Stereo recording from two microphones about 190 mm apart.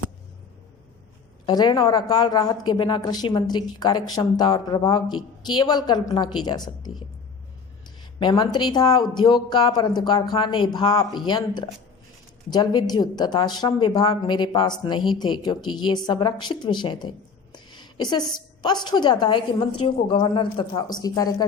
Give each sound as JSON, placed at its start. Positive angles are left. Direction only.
{"t": 1.5, "sound": "a woman's voice", "side_deg": 20}
{"t": 7.9, "sound": "a woman's voice", "side_deg": 25}
{"t": 17.5, "sound": "a sound", "side_deg": 25}
{"t": 18.6, "sound": "a woman's voice", "side_deg": 20}